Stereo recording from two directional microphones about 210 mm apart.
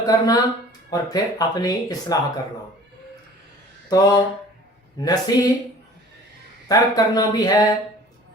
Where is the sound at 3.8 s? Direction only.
20° left (ahead or behind).